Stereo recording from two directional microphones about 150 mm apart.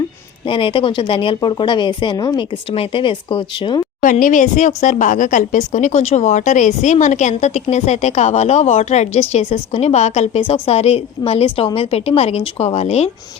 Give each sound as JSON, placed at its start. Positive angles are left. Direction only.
{"t": 0.4, "sound": "speech", "side_deg": 35}
{"t": 4.0, "sound": "a woman's voice", "side_deg": 60}